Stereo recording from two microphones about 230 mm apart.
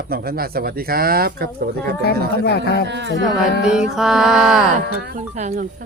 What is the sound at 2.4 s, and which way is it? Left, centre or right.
Speech, left.